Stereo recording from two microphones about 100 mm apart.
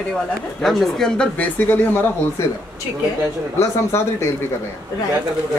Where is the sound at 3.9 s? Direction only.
25° left (ahead or behind).